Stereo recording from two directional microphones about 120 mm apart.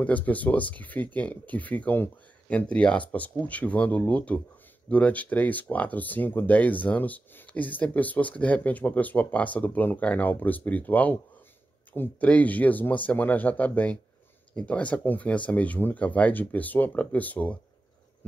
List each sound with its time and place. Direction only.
0.0 s speech: 10° left (ahead or behind)